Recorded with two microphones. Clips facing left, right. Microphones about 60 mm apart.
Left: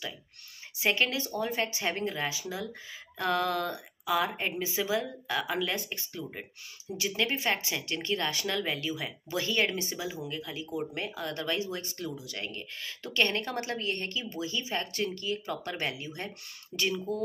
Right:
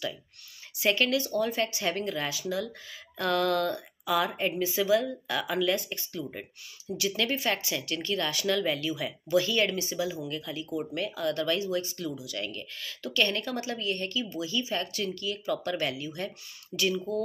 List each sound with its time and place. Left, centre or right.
0.7 s speech: left
17.1 s speech: left